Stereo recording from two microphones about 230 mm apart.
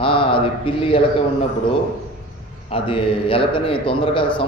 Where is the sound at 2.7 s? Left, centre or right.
Left.